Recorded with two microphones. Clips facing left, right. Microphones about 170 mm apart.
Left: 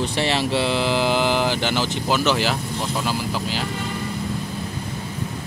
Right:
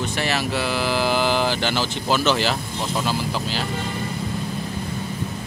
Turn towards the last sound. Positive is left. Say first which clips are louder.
# even
turn(degrees=10)  # may be behind; listen again after turning